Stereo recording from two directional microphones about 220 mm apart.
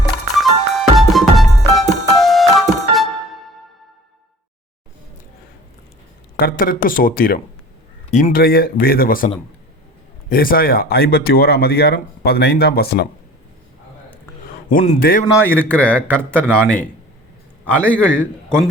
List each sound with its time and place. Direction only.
0.0 s music: centre (ahead or behind)
6.3 s speech: 40° left (ahead or behind)
14.7 s speech: 35° left (ahead or behind)
15.3 s speech: 10° left (ahead or behind)